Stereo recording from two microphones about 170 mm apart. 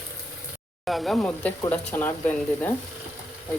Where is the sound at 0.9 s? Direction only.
Centre (ahead or behind).